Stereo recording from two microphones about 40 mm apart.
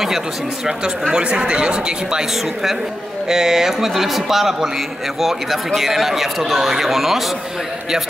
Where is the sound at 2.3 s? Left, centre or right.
Centre.